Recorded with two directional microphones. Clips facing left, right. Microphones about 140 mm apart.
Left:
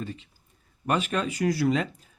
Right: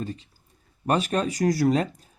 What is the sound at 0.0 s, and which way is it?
Speech, 40° right (ahead or behind).